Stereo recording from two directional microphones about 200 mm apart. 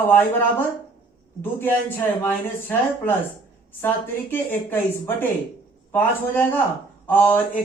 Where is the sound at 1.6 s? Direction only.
10° left (ahead or behind).